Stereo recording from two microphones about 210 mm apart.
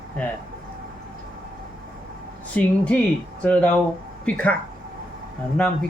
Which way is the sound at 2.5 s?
5° left (ahead or behind).